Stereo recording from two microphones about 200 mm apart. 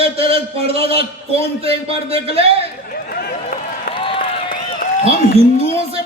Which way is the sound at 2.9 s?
50° left (ahead or behind).